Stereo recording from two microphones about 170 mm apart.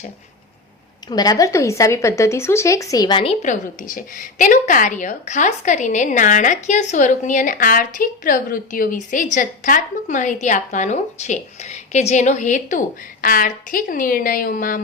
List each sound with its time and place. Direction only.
1.1 s a woman's voice: 20° left (ahead or behind)
3.4 s a woman's voice: 50° left (ahead or behind)